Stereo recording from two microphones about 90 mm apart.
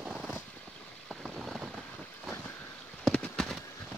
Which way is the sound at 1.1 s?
5° right (ahead or behind).